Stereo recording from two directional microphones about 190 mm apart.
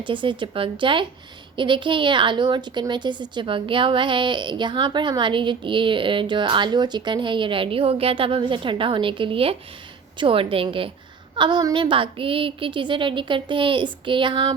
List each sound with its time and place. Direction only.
0.0 s a woman's voice: 25° right (ahead or behind)